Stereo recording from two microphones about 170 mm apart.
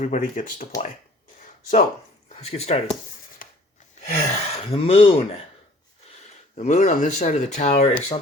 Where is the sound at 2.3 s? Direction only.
40° left (ahead or behind).